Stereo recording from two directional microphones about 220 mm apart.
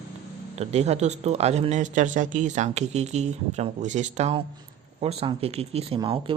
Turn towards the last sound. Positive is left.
turn(degrees=-20)  # may be behind; listen again after turning